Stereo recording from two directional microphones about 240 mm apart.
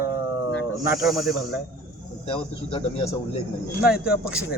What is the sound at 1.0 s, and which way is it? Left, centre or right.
Speech, centre.